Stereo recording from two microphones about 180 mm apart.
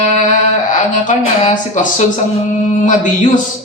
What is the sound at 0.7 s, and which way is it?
A man's voice, 45° left (ahead or behind).